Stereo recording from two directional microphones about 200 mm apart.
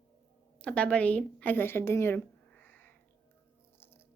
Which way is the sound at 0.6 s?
5° left (ahead or behind).